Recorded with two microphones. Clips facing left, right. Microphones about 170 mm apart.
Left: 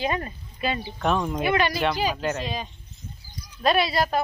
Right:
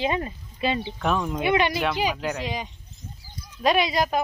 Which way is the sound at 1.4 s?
20° right (ahead or behind).